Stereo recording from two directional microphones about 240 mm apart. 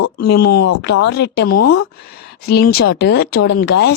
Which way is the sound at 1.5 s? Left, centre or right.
Left.